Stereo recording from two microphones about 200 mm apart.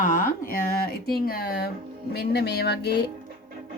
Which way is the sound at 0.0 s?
40° left (ahead or behind).